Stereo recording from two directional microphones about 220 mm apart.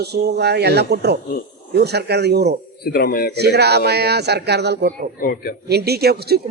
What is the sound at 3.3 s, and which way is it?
Speech, 50° right (ahead or behind).